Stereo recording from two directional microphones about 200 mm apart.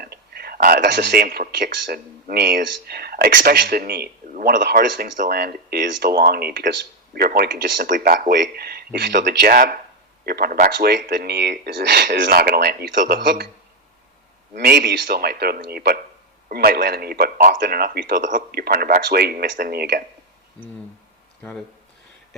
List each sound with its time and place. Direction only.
0.0 s speech: 50° right (ahead or behind)
14.5 s speech: 50° right (ahead or behind)